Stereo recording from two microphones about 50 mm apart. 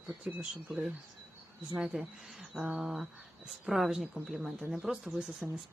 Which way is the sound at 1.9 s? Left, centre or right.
Right.